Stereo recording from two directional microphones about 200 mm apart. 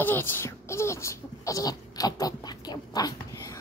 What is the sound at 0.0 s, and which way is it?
Speech, 10° left (ahead or behind).